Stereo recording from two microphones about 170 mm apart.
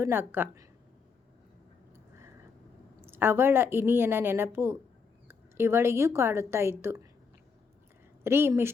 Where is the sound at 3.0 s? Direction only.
15° right (ahead or behind).